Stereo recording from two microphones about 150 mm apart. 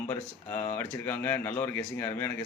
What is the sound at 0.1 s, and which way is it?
Speech, 15° left (ahead or behind).